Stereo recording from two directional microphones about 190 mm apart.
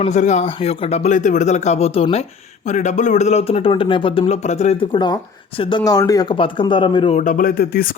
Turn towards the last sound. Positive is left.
turn(degrees=50)  # may be behind; listen again after turning